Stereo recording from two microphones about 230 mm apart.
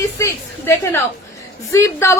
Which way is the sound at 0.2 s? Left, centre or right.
Centre.